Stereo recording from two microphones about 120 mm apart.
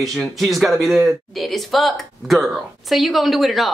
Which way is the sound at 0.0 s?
Centre (ahead or behind).